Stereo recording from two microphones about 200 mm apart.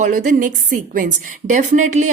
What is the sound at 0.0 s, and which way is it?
A woman's voice, 40° right (ahead or behind).